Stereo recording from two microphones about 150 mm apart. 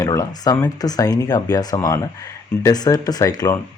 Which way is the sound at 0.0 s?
20° left (ahead or behind).